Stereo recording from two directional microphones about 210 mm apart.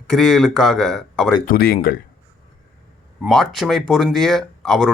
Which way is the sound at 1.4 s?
45° left (ahead or behind).